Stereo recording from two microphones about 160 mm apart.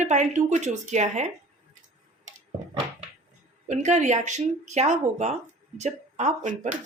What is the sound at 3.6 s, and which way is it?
Speech, 45° right (ahead or behind).